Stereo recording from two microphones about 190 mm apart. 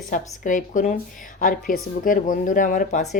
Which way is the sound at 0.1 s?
40° left (ahead or behind).